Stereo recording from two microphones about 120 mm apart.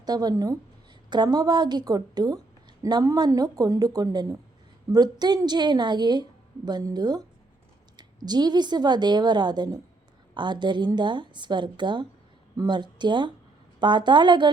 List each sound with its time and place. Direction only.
0.0 s a woman's voice: 35° right (ahead or behind)